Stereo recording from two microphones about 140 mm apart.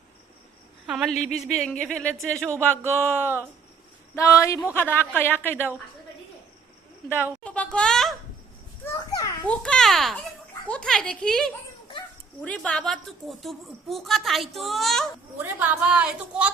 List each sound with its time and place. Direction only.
0.9 s a woman's voice: centre (ahead or behind); by 5.7 s 15° left (ahead or behind)
7.4 s speech: 10° left (ahead or behind)
9.0 s children playing: 25° left (ahead or behind)
9.5 s a child's voice: 5° left (ahead or behind)
15.5 s a woman's voice: 10° right (ahead or behind)